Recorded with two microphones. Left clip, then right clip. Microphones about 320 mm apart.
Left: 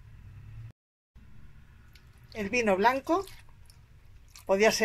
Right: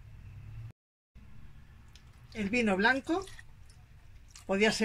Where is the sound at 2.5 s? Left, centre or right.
Centre.